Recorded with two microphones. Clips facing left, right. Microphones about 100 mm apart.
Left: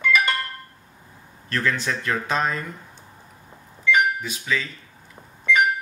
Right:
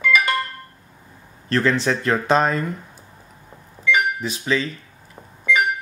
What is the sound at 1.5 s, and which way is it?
Speech, 30° right (ahead or behind).